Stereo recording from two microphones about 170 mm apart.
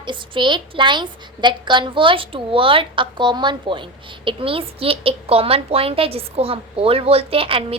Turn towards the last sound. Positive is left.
turn(degrees=-35)  # may be behind; listen again after turning